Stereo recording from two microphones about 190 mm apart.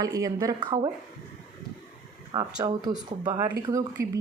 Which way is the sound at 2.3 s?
20° right (ahead or behind).